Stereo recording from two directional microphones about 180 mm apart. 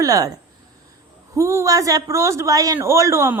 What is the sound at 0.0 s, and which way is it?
A woman's voice, 20° right (ahead or behind).